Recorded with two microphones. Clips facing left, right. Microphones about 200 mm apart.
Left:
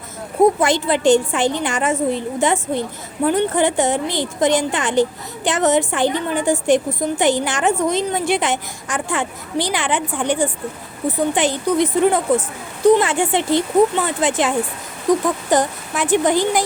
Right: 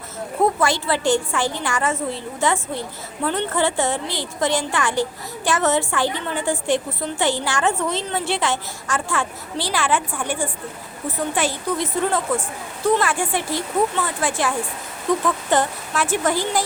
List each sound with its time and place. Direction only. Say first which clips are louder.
0.6 s a woman's voice: left 4 dB; 20° left (ahead or behind)